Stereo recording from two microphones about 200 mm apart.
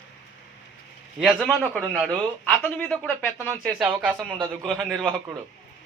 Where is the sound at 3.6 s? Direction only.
5° right (ahead or behind).